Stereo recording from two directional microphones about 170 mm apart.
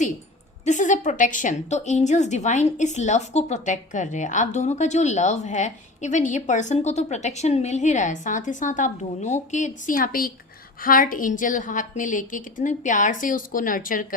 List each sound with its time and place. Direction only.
0.6 s a woman's voice: 45° left (ahead or behind)